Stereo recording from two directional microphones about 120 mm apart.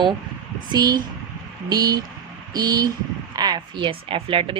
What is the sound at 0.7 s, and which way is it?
Speech, 35° right (ahead or behind).